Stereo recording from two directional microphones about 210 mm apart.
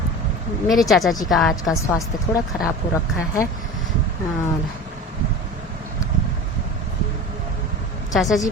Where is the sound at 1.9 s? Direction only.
15° left (ahead or behind).